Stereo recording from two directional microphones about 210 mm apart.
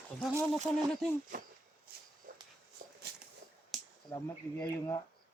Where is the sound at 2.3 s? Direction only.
40° right (ahead or behind).